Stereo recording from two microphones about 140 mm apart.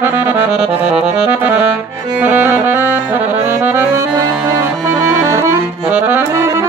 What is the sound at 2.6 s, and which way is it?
Saxophone, 15° right (ahead or behind).